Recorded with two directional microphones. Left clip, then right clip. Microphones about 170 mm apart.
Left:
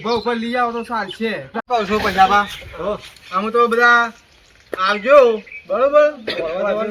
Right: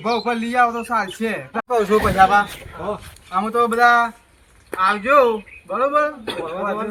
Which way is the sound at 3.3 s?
20° right (ahead or behind).